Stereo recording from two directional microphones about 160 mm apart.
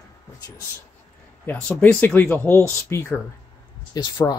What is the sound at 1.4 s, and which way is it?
Speech, 10° left (ahead or behind).